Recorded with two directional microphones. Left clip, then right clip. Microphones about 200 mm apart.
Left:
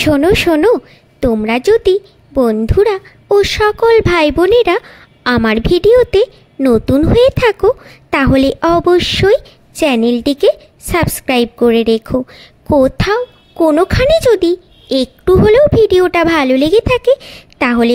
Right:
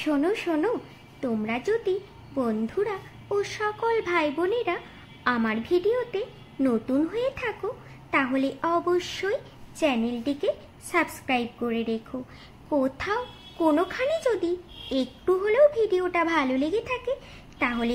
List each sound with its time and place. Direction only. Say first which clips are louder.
0.0 s speech: left 15 dB; 50° left (ahead or behind)